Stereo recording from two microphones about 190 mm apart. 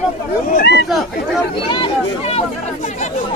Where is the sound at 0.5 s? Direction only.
60° left (ahead or behind).